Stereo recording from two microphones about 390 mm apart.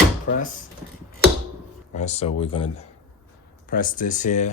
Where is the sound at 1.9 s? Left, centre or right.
Centre.